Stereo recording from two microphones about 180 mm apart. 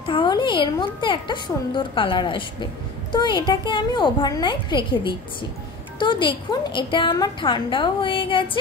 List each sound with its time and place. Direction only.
0.0 s a woman's voice: 30° left (ahead or behind)